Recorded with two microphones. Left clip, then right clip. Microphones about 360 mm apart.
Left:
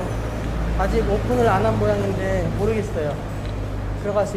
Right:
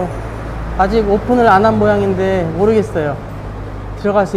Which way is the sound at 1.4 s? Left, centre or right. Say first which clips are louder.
Right 10 dB; right.